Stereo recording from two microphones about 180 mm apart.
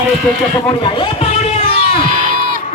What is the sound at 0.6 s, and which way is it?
Speech, 30° left (ahead or behind).